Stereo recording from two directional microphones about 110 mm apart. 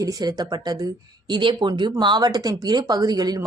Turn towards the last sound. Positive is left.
turn(degrees=-35)  # may be behind; listen again after turning